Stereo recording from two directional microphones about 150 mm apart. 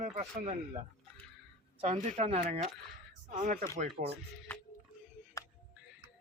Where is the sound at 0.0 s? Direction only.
55° right (ahead or behind).